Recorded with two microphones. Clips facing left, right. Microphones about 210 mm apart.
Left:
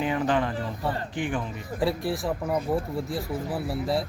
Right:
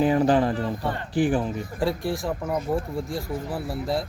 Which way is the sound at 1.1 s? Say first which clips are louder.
Right 7 dB; 35° right (ahead or behind).